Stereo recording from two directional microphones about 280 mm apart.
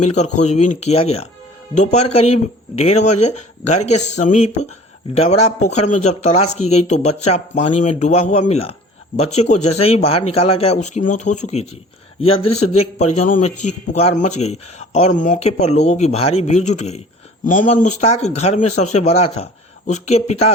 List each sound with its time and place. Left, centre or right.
0.0 s speech: left
12.7 s speech: left